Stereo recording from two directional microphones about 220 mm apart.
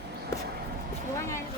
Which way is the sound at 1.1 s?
15° left (ahead or behind).